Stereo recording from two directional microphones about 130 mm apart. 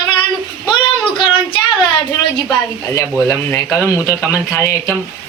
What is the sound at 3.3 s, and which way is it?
Speech, 25° left (ahead or behind).